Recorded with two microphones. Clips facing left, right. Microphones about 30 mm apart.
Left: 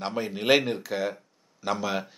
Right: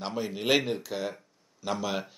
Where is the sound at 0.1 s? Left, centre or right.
Centre.